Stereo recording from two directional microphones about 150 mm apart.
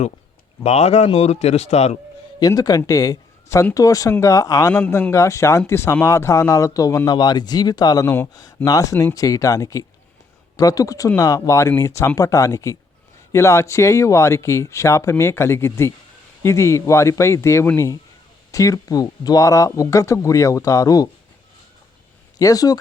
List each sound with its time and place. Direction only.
0.6 s a man's voice: 45° left (ahead or behind)
2.4 s a man's voice: 25° left (ahead or behind)
22.4 s speech: 25° left (ahead or behind)